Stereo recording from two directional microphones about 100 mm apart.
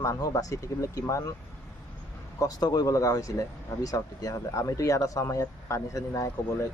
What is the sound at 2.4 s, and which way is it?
Speech, 40° left (ahead or behind).